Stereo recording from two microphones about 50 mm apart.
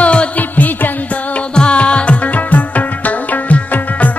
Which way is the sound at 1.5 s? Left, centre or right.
Left.